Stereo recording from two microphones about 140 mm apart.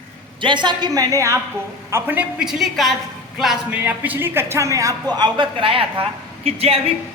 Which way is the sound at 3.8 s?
15° right (ahead or behind).